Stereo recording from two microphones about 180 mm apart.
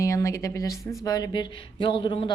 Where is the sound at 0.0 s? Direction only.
15° left (ahead or behind).